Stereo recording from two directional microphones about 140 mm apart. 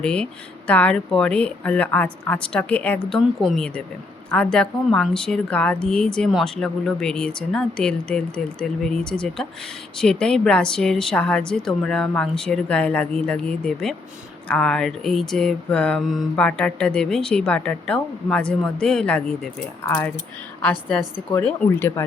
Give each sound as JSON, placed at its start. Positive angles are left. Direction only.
{"t": 0.0, "sound": "a woman's voice", "side_deg": 5}